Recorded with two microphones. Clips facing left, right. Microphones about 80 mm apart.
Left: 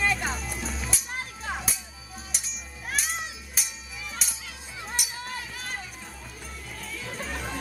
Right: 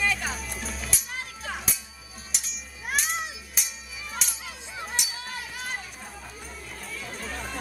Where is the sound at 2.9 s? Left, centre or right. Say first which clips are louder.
Right 3 dB; centre.